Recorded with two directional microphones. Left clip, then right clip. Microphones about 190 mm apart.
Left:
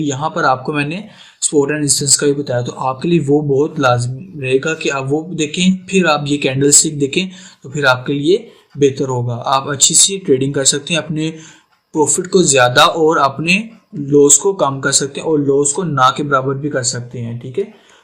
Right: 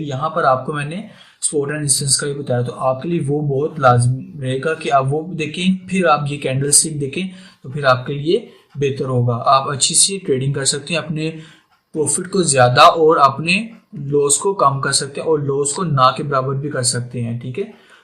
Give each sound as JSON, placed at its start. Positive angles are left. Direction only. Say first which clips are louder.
{"t": 0.0, "sound": "a man's voice", "louder": "left 2 dB", "side_deg": 40}